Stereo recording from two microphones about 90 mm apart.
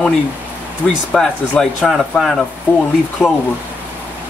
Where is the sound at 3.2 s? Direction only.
15° left (ahead or behind).